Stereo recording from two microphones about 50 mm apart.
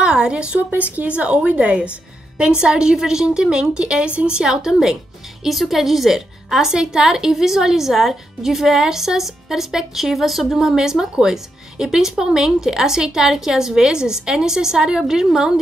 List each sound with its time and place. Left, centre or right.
0.0 s a sound: centre
0.7 s a woman's voice: right; by 10.8 s centre
10.8 s a woman's voice: centre